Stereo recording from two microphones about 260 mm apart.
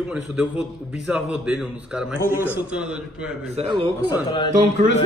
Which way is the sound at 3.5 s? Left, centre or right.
Right.